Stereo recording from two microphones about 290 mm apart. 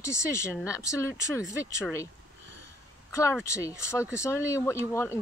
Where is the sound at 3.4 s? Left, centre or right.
Centre.